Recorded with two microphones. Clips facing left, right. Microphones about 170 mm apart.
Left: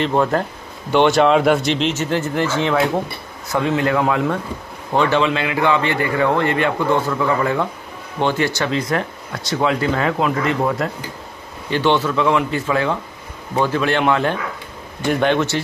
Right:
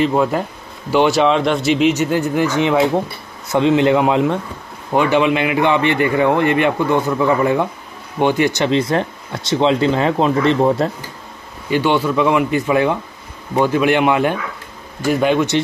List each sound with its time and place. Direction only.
0.0 s a man's voice: 5° right (ahead or behind)
1.7 s a man's voice: 10° right (ahead or behind); by 10.9 s 30° right (ahead or behind)
11.7 s a man's voice: 10° right (ahead or behind)